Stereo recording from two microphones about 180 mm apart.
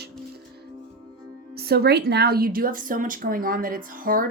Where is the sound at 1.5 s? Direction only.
60° right (ahead or behind).